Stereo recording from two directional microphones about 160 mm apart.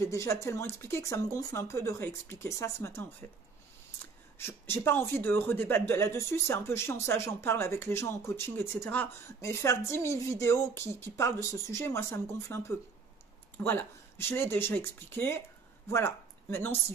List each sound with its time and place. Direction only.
0.0 s speech: 20° left (ahead or behind)
4.4 s speech: 15° left (ahead or behind)